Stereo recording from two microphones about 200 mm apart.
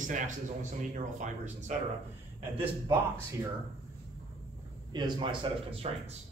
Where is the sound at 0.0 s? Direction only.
40° right (ahead or behind).